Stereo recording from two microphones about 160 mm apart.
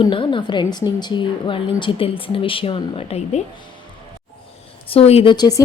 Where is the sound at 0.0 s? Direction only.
30° left (ahead or behind).